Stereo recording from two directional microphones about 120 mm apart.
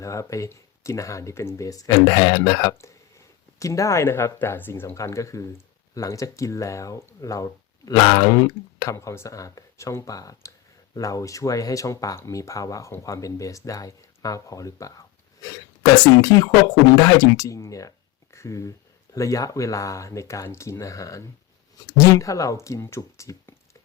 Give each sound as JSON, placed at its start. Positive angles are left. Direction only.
{"t": 0.0, "sound": "speech", "side_deg": 25}